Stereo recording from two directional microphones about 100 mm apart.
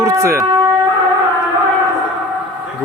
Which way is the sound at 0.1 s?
30° right (ahead or behind).